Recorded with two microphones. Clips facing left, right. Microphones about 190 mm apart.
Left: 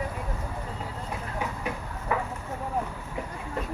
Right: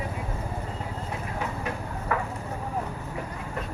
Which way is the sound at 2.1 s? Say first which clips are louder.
Even; 15° left (ahead or behind).